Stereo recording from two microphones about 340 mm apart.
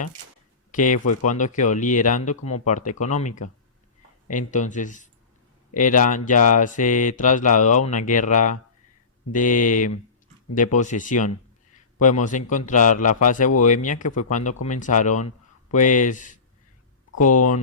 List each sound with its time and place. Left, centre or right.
0.7 s speech: left
0.9 s speech: left
1.5 s speech: left
4.5 s speech: left
17.1 s speech: left